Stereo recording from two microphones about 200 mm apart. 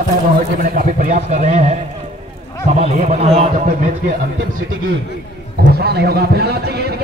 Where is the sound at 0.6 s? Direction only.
45° right (ahead or behind).